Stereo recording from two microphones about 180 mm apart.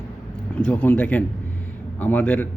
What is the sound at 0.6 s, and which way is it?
Speech, 5° left (ahead or behind).